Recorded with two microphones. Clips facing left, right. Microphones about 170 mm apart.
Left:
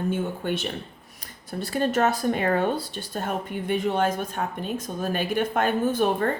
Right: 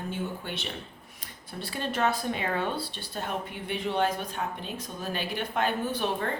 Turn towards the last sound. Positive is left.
turn(degrees=50)  # may be behind; listen again after turning